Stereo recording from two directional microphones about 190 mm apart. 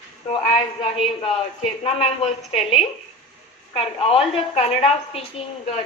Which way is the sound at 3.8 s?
30° left (ahead or behind).